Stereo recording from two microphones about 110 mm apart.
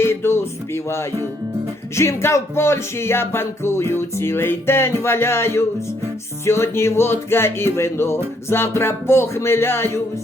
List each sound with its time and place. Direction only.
0.0 s music: 20° left (ahead or behind)